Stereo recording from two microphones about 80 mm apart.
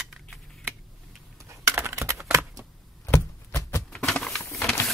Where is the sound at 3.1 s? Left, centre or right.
Left.